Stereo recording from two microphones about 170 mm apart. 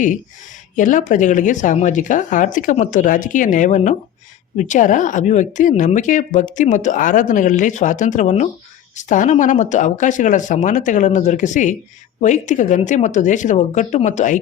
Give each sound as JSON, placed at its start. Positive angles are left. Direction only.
{"t": 0.8, "sound": "speech", "side_deg": 50}